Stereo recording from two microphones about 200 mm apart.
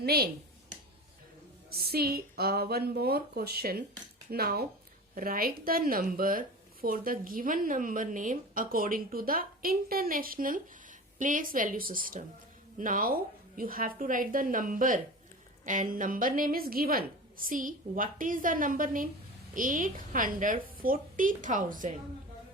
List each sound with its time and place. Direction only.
0.0 s speech: 50° right (ahead or behind)
1.7 s a woman's voice: 50° right (ahead or behind)